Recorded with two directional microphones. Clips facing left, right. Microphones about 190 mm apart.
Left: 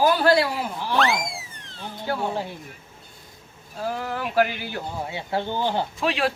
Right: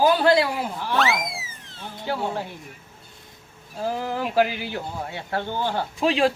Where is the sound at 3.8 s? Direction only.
15° right (ahead or behind).